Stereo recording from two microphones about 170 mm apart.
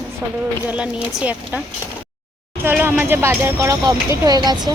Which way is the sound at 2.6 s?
10° right (ahead or behind).